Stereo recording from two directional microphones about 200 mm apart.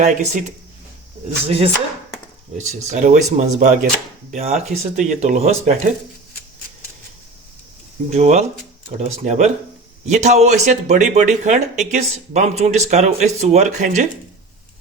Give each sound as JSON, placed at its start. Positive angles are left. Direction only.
{"t": 0.0, "sound": "speech", "side_deg": -35}
{"t": 8.1, "sound": "speech", "side_deg": -35}